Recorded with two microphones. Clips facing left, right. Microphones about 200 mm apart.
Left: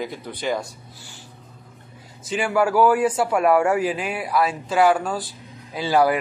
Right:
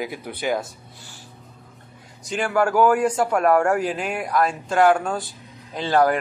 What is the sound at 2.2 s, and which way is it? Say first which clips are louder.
A man's voice: left 1 dB; 5° left (ahead or behind).